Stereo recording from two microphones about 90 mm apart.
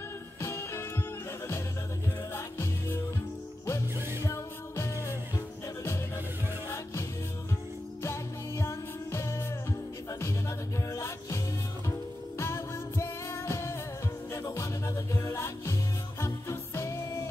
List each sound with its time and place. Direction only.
0.4 s music: 30° left (ahead or behind)
2.3 s music: 25° left (ahead or behind)
4.2 s music: 30° left (ahead or behind)
8.0 s music: 30° left (ahead or behind)
10.9 s music: 30° left (ahead or behind)
12.4 s music: 30° left (ahead or behind)